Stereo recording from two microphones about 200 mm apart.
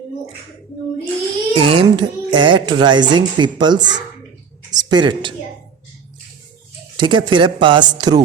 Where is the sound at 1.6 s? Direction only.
25° right (ahead or behind).